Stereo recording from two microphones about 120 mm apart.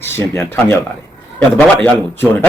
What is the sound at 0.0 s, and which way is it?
Speech, 20° left (ahead or behind).